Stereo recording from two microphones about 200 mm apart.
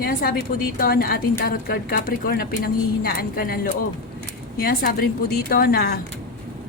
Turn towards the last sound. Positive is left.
turn(degrees=50)  # may be behind; listen again after turning